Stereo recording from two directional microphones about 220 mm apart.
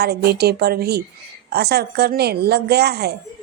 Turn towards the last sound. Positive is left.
turn(degrees=-45)  # may be behind; listen again after turning